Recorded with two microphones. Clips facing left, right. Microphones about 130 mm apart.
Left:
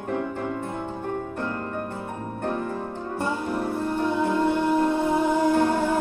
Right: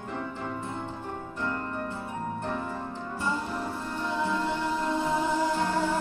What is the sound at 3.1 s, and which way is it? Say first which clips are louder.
Music: left 5 dB; 55° left (ahead or behind).